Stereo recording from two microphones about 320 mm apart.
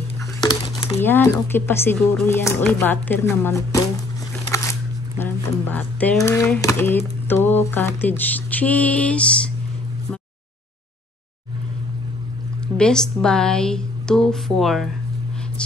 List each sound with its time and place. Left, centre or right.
0.4 s speech: centre
5.2 s speech: centre
7.2 s mantra: centre
12.7 s mantra: centre